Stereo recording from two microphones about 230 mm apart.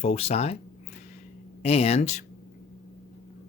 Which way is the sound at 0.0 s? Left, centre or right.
Left.